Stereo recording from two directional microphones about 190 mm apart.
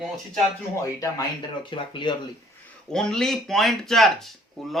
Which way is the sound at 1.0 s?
25° left (ahead or behind).